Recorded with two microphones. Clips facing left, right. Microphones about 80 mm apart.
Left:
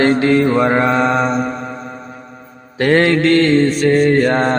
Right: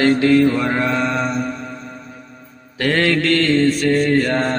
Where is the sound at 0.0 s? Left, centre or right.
Left.